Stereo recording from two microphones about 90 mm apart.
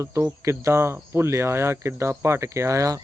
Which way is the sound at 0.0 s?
30° right (ahead or behind).